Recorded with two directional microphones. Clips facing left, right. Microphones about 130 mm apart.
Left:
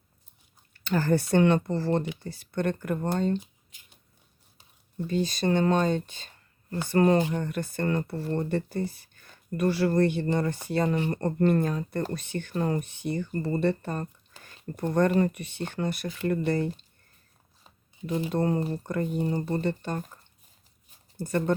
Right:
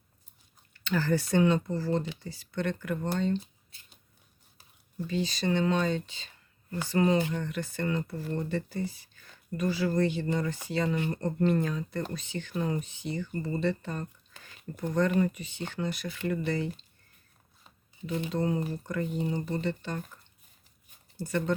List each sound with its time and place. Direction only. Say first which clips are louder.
0.9 s speech: left 3 dB; 50° left (ahead or behind); by 2.0 s 65° left (ahead or behind)
2.2 s speech: left 4 dB; 55° left (ahead or behind)
5.0 s speech: left 4 dB; 50° left (ahead or behind)
18.3 s speech: left 3 dB; 50° left (ahead or behind)
21.2 s speech: left 3 dB; 50° left (ahead or behind)